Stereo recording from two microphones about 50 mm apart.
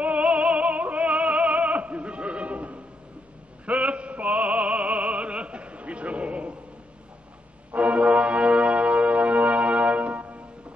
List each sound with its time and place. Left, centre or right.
0.0 s music: right
3.6 s opera: right
7.7 s music: right